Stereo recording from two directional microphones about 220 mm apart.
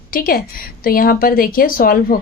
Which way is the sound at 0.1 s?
40° left (ahead or behind).